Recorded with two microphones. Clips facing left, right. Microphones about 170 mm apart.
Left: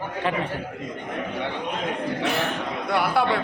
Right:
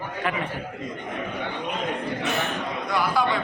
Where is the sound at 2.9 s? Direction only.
65° left (ahead or behind).